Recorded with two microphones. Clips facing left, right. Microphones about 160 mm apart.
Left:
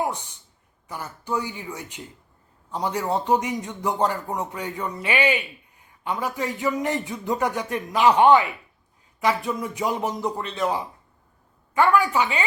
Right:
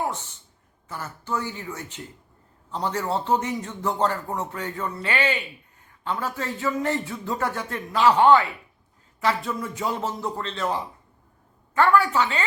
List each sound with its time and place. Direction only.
0.0 s a man's voice: 15° left (ahead or behind)